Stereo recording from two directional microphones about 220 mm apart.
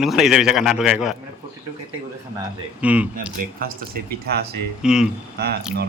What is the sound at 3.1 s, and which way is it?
Speech, 40° right (ahead or behind).